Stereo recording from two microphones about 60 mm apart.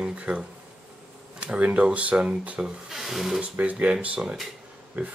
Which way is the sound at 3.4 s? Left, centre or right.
Right.